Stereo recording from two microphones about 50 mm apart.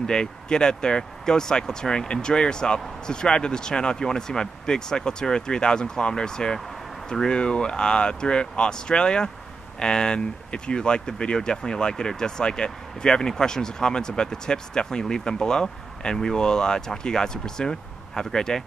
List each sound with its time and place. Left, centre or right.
0.0 s speech: centre